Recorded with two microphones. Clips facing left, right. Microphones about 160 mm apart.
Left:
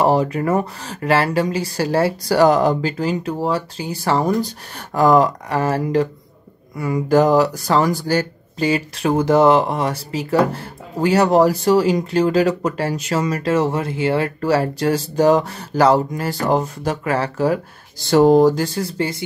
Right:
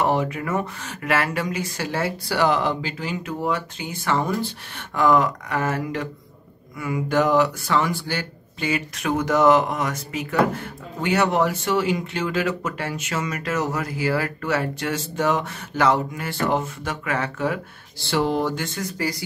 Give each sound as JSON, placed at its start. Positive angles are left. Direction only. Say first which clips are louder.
{"t": 0.0, "sound": "speech", "louder": "left 6 dB", "side_deg": 35}